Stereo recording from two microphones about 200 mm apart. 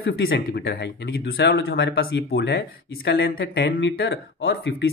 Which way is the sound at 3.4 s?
50° left (ahead or behind).